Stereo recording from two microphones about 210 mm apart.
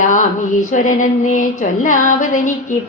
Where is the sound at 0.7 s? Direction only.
40° left (ahead or behind).